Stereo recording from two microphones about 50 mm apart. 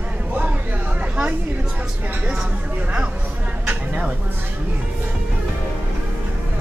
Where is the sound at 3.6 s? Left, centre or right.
Right.